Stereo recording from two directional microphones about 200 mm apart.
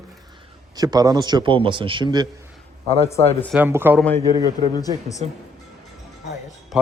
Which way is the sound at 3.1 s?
15° left (ahead or behind).